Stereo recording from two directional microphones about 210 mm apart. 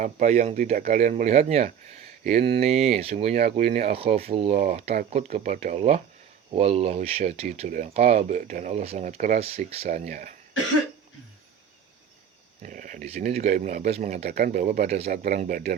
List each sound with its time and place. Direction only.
0.0 s speech: 35° right (ahead or behind)
12.6 s speech: 40° right (ahead or behind)
15.1 s speech: 45° right (ahead or behind)